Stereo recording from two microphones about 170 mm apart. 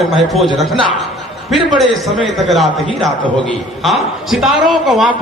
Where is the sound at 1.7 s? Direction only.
Centre (ahead or behind).